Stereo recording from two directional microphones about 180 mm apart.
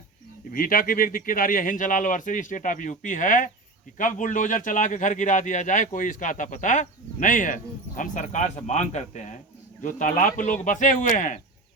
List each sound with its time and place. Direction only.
0.5 s a man's voice: 50° left (ahead or behind)